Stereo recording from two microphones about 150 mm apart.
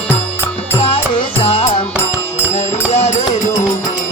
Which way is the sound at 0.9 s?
35° left (ahead or behind).